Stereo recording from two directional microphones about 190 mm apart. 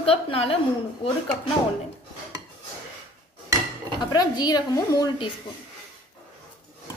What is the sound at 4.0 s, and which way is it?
A woman's voice, 20° left (ahead or behind).